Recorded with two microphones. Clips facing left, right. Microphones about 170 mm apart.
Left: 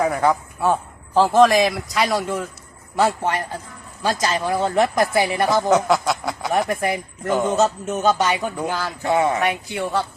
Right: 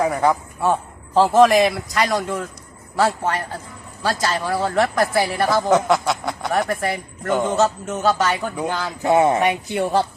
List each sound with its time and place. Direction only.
0.0 s a man's voice: centre (ahead or behind); by 5.6 s 15° left (ahead or behind)
5.6 s a man's voice: centre (ahead or behind)
6.7 s a man's voice: 15° left (ahead or behind)
7.3 s a man's voice: centre (ahead or behind)
7.6 s a man's voice: 20° left (ahead or behind)
8.6 s a man's voice: 5° left (ahead or behind)
9.0 s a man's voice: 20° right (ahead or behind)